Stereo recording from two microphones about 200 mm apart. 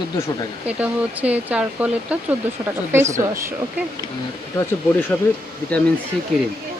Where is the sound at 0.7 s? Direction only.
5° right (ahead or behind).